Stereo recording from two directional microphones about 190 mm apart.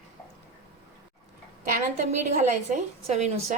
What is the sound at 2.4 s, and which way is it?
A woman's voice, 35° right (ahead or behind).